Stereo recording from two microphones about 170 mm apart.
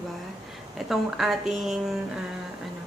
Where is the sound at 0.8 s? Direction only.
Centre (ahead or behind).